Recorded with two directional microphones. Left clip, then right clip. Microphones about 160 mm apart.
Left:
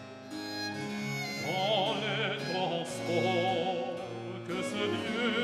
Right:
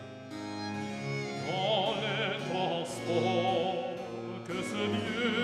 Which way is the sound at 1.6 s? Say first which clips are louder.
Even; centre (ahead or behind).